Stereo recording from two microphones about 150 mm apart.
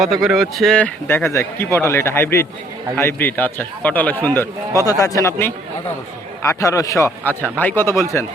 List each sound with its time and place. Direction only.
0.0 s speech: centre (ahead or behind)
1.0 s speech: 15° left (ahead or behind)
4.8 s a man's voice: 25° left (ahead or behind)